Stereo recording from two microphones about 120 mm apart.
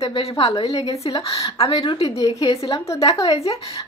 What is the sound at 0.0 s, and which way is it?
Speech, 55° left (ahead or behind).